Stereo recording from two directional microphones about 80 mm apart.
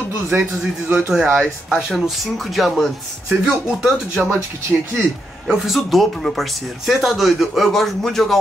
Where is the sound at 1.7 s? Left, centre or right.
Centre.